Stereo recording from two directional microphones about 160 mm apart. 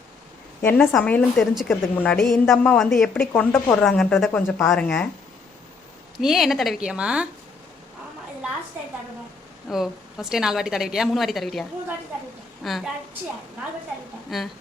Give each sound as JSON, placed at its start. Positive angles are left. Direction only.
{"t": 0.6, "sound": "a woman's voice", "side_deg": 5}
{"t": 6.1, "sound": "a woman's voice", "side_deg": 0}
{"t": 9.6, "sound": "a woman's voice", "side_deg": 0}
{"t": 12.6, "sound": "a woman's voice", "side_deg": 0}
{"t": 14.3, "sound": "speech", "side_deg": 0}